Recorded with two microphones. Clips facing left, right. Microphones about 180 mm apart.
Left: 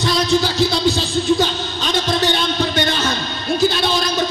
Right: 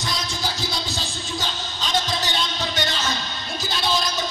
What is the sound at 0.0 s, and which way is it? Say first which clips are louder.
Music: left 12 dB; 70° left (ahead or behind).